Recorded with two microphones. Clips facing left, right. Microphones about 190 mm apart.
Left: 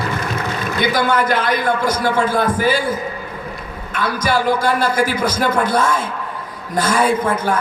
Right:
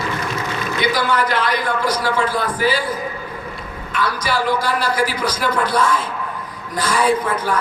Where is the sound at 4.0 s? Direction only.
50° left (ahead or behind).